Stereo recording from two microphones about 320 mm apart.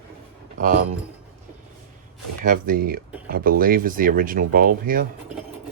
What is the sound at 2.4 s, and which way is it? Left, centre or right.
Speech, right.